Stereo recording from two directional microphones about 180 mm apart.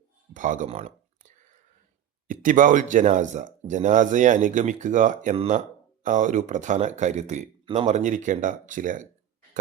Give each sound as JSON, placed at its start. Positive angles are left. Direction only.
{"t": 0.3, "sound": "speech", "side_deg": -45}